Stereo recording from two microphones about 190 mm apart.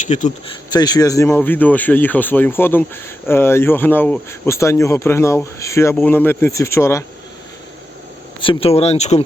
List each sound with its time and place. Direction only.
0.0 s speech: 40° left (ahead or behind)
0.7 s speech: 20° left (ahead or behind)
8.4 s speech: 30° left (ahead or behind)